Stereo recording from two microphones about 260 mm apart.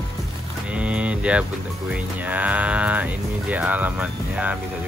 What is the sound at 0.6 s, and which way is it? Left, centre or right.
Speech, centre.